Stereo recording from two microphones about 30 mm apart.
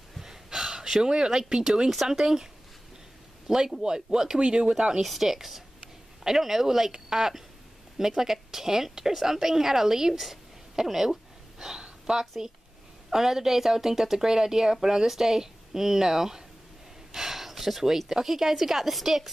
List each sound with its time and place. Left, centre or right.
0.2 s gasp: centre
1.0 s a woman's voice: right
3.4 s speech: centre
5.0 s a woman's voice: centre
11.8 s a sound: right
13.1 s a woman's voice: centre